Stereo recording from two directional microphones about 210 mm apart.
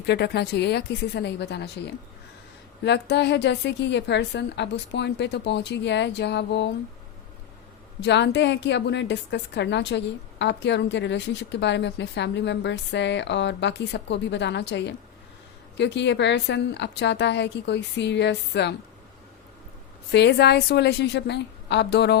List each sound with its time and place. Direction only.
0.0 s a woman's voice: 50° left (ahead or behind)
8.0 s a woman's voice: 55° left (ahead or behind)
20.1 s a woman's voice: 55° left (ahead or behind)